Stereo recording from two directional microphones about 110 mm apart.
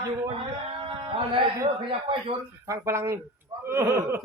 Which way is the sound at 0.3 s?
50° right (ahead or behind).